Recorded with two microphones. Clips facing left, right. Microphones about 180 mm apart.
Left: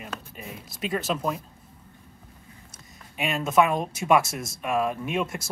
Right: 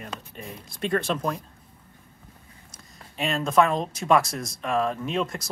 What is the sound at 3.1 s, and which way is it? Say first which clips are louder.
Speech: right 1 dB; 5° left (ahead or behind).